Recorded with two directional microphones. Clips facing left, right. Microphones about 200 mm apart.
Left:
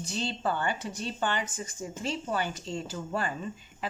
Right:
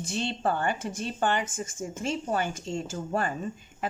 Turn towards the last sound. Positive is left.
turn(degrees=-50)  # may be behind; listen again after turning